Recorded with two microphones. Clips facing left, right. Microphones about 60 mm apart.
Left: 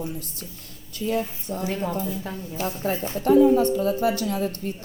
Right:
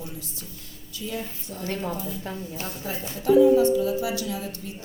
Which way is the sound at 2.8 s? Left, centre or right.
Left.